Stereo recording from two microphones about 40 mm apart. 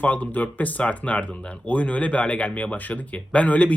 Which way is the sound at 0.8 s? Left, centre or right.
Left.